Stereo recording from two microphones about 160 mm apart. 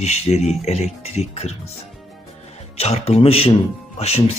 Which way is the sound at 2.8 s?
40° left (ahead or behind).